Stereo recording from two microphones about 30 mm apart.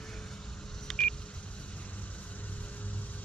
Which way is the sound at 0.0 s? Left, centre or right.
Centre.